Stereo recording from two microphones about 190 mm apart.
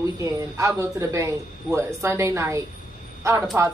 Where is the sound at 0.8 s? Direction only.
15° right (ahead or behind).